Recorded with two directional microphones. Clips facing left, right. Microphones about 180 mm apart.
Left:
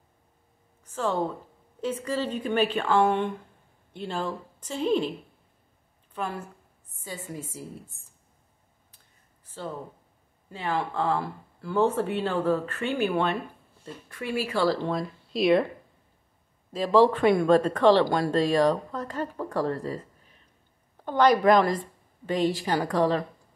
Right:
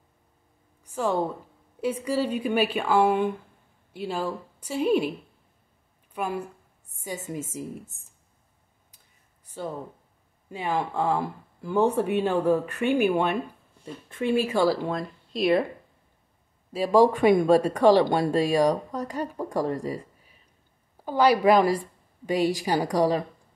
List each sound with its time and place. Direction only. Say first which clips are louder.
0.8 s a woman's voice: right 2 dB; 10° right (ahead or behind)
6.1 s speech: right 3 dB; 10° right (ahead or behind)
10.5 s speech: right 2 dB; 15° right (ahead or behind)
14.9 s speech: left 1 dB; centre (ahead or behind)
16.7 s speech: right 1 dB; 10° right (ahead or behind)